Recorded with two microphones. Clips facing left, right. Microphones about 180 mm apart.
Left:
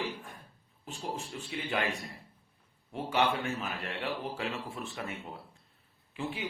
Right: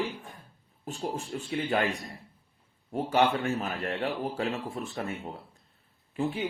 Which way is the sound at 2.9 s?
45° right (ahead or behind).